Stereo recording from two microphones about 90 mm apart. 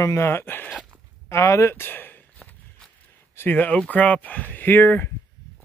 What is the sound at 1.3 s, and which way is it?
Speech, 35° left (ahead or behind).